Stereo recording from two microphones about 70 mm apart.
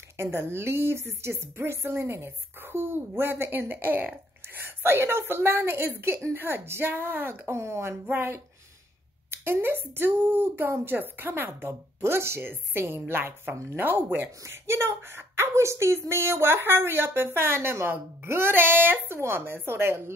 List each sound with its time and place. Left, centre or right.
0.2 s a woman's voice: right